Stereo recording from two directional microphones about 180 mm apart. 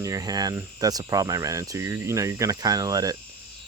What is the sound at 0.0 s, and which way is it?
Speech, 20° right (ahead or behind).